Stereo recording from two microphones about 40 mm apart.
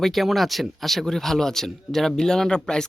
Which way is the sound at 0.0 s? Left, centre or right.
Centre.